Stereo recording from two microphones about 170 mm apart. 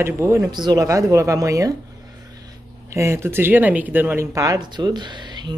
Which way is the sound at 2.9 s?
15° right (ahead or behind).